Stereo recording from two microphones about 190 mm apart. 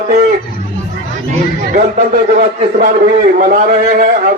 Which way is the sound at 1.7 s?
40° right (ahead or behind).